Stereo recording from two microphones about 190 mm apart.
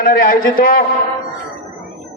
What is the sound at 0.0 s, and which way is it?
Speech, 45° left (ahead or behind).